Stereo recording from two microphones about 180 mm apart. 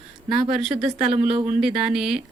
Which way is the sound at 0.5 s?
Centre (ahead or behind).